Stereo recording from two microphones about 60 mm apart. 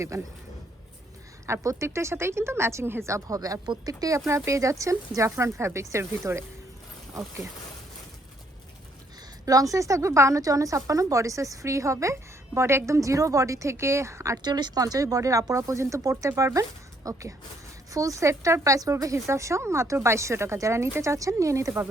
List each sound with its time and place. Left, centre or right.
0.0 s speech: right
1.6 s a woman's voice: right
3.1 s speech: right
4.3 s speech: right
9.5 s speech: right
14.8 s speech: right